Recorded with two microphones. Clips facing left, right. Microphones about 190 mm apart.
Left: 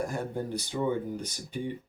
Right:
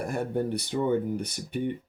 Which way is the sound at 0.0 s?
65° right (ahead or behind).